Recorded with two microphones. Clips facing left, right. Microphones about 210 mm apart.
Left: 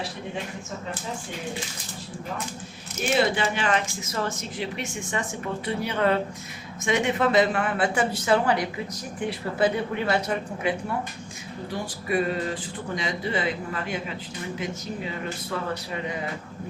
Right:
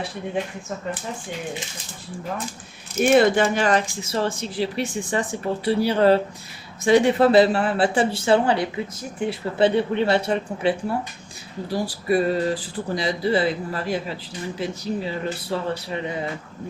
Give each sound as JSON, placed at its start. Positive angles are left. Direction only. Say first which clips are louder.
{"t": 3.0, "sound": "speech", "louder": "right 7 dB", "side_deg": -50}